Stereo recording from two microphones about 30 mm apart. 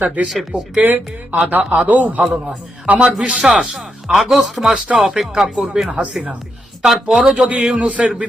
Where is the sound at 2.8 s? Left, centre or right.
Right.